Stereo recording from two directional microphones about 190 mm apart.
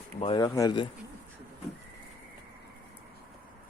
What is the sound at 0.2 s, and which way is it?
Speech, 25° left (ahead or behind).